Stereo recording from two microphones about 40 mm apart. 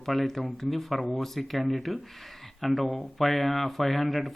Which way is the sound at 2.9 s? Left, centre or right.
Left.